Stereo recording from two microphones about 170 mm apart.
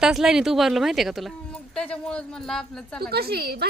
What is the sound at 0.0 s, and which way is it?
A woman's voice, 5° right (ahead or behind).